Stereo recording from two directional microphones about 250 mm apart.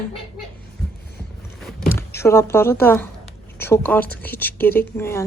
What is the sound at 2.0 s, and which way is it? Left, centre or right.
A woman's voice, centre.